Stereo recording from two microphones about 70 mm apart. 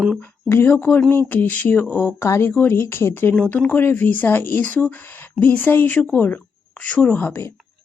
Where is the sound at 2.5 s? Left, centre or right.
Left.